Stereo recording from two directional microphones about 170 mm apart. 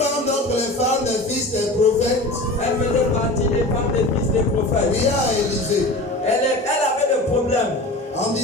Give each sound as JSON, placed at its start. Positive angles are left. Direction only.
{"t": 1.8, "sound": "music", "side_deg": 40}